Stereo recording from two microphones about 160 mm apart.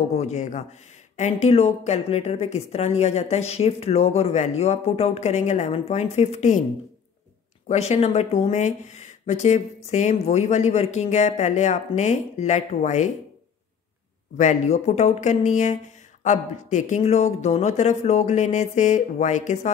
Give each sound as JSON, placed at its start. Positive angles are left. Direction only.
{"t": 0.1, "sound": "speech", "side_deg": 45}
{"t": 7.6, "sound": "speech", "side_deg": 45}
{"t": 14.3, "sound": "speech", "side_deg": 50}